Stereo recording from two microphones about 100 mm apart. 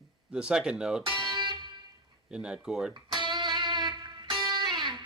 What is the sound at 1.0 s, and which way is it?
Music, 50° right (ahead or behind).